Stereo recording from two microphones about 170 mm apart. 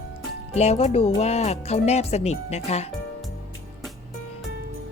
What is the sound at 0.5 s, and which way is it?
Speech, 40° left (ahead or behind).